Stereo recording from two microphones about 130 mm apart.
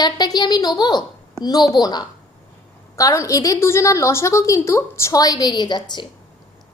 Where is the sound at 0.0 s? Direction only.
30° left (ahead or behind).